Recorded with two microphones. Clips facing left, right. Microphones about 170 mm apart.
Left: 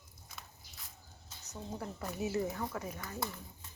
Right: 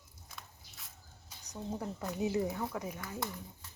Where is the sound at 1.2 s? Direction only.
15° right (ahead or behind).